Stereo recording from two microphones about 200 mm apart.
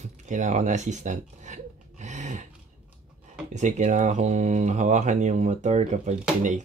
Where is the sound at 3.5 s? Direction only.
35° right (ahead or behind).